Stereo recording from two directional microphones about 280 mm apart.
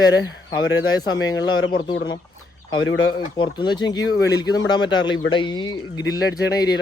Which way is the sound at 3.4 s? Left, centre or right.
Centre.